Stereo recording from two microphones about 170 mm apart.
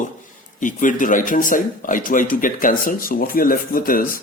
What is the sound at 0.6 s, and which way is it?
A man's voice, 50° left (ahead or behind).